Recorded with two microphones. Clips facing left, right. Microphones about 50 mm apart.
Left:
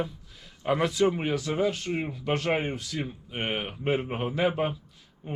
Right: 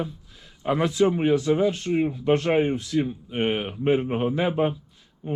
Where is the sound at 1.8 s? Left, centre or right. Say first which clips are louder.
Right 7 dB; centre.